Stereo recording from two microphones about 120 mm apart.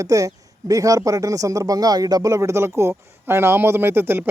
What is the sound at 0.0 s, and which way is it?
Speech, 30° right (ahead or behind).